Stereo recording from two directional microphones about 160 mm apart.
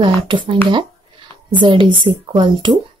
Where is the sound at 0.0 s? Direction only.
30° right (ahead or behind).